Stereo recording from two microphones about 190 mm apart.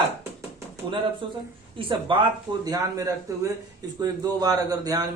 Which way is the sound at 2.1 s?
25° right (ahead or behind).